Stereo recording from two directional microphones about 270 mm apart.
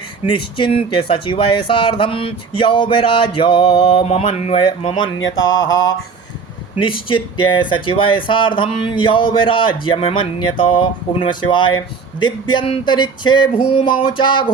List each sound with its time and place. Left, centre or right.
0.3 s speech: centre
5.2 s mantra: left
6.8 s speech: centre
12.2 s a sound: centre